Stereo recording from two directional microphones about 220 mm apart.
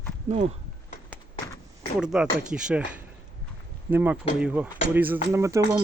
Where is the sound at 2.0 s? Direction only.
5° right (ahead or behind).